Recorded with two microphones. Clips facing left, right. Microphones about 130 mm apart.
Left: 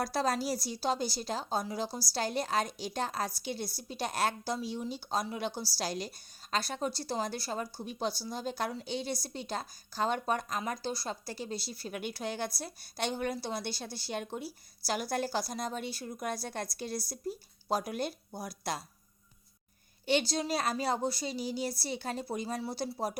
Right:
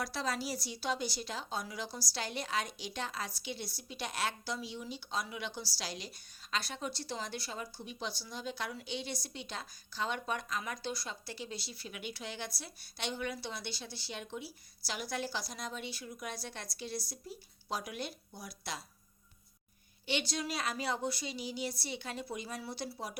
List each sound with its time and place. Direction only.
0.0 s a woman's voice: 45° left (ahead or behind)
20.1 s a woman's voice: 40° left (ahead or behind)